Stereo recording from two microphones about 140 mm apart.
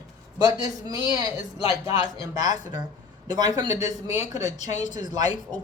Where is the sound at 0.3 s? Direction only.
25° right (ahead or behind).